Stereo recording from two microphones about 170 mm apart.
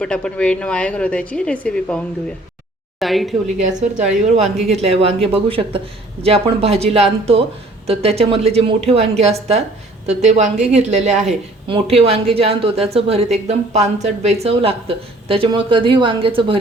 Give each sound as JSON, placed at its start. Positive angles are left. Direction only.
{"t": 0.0, "sound": "speech", "side_deg": 5}
{"t": 3.6, "sound": "a woman's voice", "side_deg": -45}